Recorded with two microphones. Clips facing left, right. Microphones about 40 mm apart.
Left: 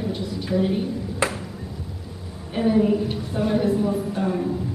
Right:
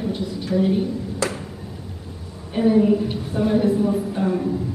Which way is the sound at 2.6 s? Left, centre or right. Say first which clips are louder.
Right 3 dB; centre.